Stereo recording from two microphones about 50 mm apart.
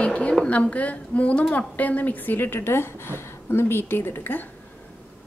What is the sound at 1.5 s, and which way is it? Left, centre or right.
Speech, left.